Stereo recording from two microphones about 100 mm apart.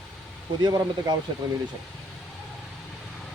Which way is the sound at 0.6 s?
40° right (ahead or behind).